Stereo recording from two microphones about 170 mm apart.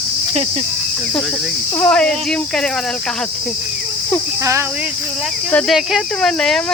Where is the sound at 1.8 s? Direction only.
5° left (ahead or behind).